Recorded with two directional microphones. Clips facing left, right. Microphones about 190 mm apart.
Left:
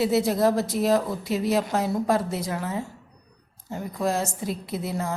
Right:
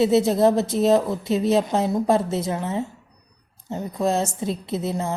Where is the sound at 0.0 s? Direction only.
25° right (ahead or behind).